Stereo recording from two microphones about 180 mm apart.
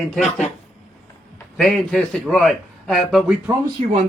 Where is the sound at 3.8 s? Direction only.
35° right (ahead or behind).